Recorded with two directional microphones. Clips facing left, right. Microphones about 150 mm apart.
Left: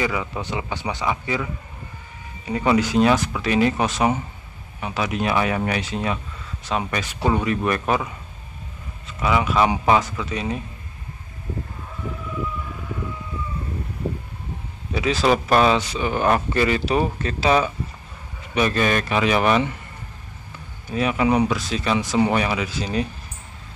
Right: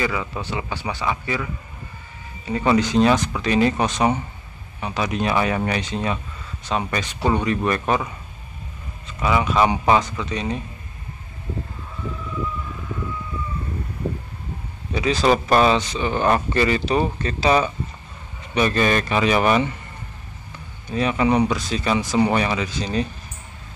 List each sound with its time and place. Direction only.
0.0 s a man's voice: 15° left (ahead or behind)
15.0 s speech: 5° left (ahead or behind)
20.9 s speech: 5° left (ahead or behind)